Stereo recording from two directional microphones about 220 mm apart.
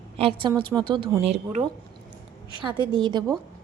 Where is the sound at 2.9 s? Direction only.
20° right (ahead or behind).